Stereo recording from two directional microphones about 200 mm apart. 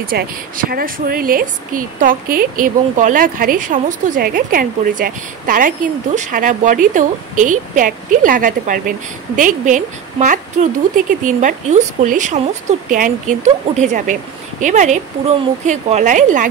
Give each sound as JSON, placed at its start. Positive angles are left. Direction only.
{"t": 0.0, "sound": "a woman's voice", "side_deg": -45}